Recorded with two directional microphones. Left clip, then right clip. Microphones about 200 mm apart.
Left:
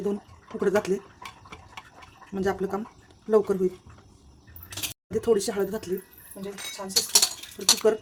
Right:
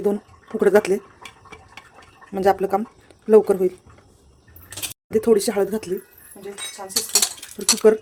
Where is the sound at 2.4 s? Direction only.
35° right (ahead or behind).